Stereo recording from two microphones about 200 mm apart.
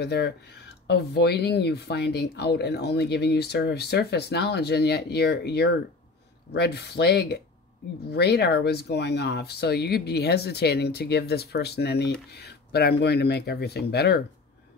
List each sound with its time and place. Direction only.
0.0 s speech: 55° left (ahead or behind)